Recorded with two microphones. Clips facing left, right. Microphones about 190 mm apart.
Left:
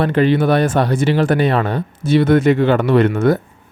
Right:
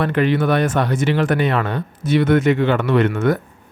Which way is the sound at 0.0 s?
30° left (ahead or behind).